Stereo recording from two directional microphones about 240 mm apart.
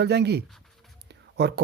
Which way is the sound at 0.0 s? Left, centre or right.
Right.